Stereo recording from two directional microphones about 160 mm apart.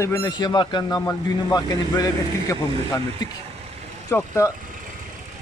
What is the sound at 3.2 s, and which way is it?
Speech, 25° left (ahead or behind).